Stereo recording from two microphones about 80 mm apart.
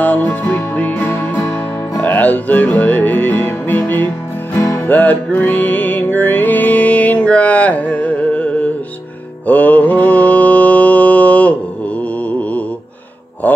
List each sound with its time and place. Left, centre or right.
0.0 s music: left
4.6 s music: left
4.8 s music: left
9.5 s mantra: left